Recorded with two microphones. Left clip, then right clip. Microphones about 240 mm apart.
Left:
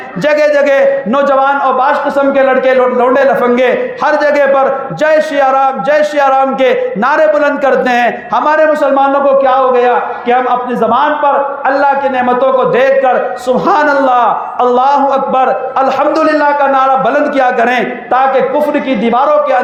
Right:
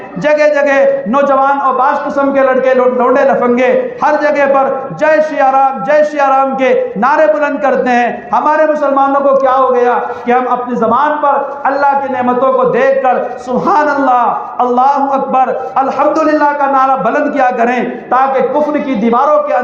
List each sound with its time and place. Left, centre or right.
0.3 s a man's voice: left